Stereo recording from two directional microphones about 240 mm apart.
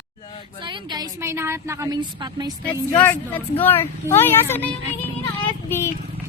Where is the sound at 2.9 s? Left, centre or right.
Centre.